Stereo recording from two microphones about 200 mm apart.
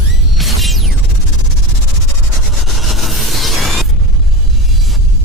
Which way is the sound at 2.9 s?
Centre (ahead or behind).